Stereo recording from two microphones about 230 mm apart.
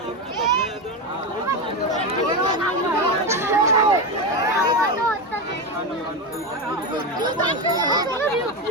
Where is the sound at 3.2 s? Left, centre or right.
Centre.